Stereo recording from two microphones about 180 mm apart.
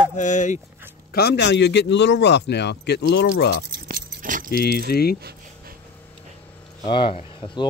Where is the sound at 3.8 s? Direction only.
50° right (ahead or behind).